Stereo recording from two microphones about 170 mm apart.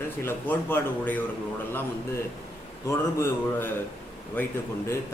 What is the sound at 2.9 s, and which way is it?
Speech, 15° left (ahead or behind).